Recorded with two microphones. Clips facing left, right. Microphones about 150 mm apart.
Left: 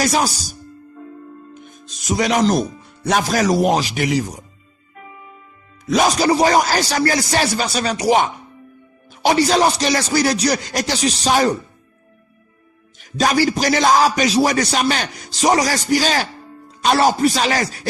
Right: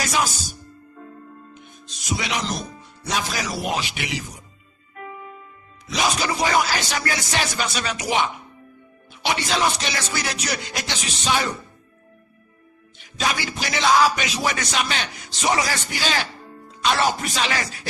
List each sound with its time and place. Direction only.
0.0 s speech: 40° left (ahead or behind)
2.0 s a man's voice: 45° left (ahead or behind)
3.2 s speech: 45° left (ahead or behind)
5.8 s speech: 45° left (ahead or behind)
13.0 s speech: 40° left (ahead or behind)